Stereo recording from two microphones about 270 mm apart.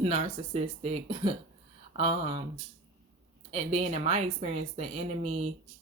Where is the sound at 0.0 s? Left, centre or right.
Right.